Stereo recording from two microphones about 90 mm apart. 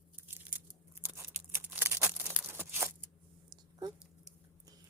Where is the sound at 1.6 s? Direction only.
20° right (ahead or behind).